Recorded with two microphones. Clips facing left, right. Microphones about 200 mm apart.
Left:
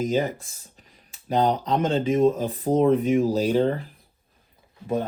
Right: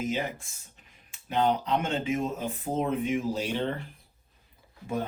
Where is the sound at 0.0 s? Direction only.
40° left (ahead or behind).